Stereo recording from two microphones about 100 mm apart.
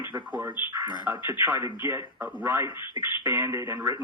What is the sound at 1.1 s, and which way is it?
Speech, 50° left (ahead or behind).